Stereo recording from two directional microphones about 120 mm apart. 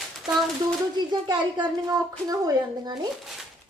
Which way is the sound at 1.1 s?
35° right (ahead or behind).